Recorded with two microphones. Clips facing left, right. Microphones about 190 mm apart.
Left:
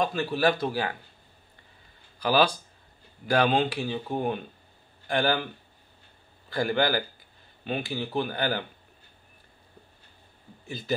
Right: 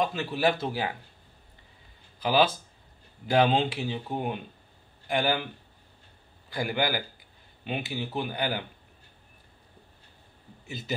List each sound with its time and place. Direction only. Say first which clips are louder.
0.0 s speech: left 2 dB; 20° right (ahead or behind)
2.1 s speech: left 1 dB; 20° right (ahead or behind)
5.0 s speech: left 1 dB; 15° right (ahead or behind)
6.5 s speech: left 3 dB; 15° right (ahead or behind)
10.7 s speech: left 4 dB; 20° right (ahead or behind)